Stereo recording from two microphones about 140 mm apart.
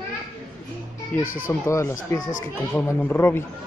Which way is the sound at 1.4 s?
20° left (ahead or behind).